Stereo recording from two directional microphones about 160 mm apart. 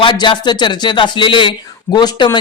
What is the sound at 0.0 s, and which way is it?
Speech, 30° left (ahead or behind).